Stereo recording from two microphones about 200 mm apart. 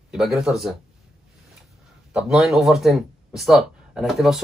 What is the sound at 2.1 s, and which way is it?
Speech, 5° right (ahead or behind).